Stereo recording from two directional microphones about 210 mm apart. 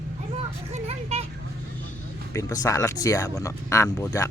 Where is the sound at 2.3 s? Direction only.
15° left (ahead or behind).